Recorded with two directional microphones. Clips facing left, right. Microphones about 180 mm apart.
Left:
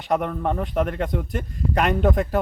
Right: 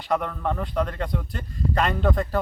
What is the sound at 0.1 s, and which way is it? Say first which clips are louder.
A man's voice: left 3 dB; 20° left (ahead or behind).